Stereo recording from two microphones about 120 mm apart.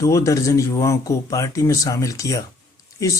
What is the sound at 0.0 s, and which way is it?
Speech, 25° left (ahead or behind).